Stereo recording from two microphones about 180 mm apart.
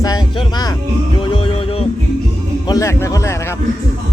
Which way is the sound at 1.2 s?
30° left (ahead or behind).